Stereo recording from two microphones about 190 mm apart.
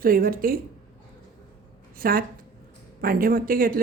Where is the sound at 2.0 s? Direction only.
50° right (ahead or behind).